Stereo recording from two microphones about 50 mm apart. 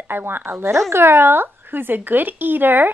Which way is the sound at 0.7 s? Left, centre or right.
Right.